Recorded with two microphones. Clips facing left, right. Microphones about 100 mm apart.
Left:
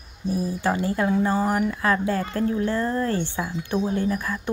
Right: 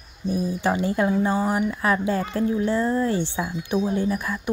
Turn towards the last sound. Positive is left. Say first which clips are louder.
# right 1 dB
turn(degrees=-15)  # may be behind; listen again after turning